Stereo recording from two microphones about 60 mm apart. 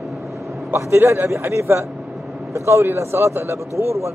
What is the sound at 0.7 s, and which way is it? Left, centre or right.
Speech, right.